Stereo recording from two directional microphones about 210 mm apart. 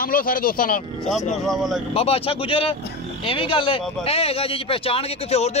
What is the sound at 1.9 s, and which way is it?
Speech, 30° left (ahead or behind).